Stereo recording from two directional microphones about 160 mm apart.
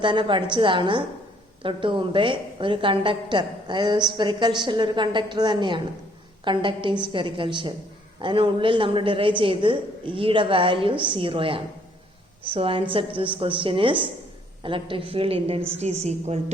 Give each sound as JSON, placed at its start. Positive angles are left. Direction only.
{"t": 0.0, "sound": "a woman's voice", "side_deg": -30}